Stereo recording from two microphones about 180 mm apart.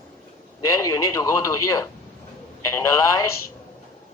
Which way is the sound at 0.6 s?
15° left (ahead or behind).